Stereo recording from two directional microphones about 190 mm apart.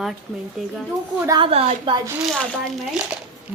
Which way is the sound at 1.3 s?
30° right (ahead or behind).